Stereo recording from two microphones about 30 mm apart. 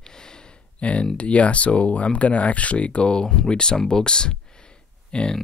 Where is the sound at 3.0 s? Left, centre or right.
Left.